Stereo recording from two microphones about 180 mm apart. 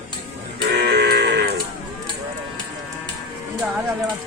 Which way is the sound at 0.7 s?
65° right (ahead or behind).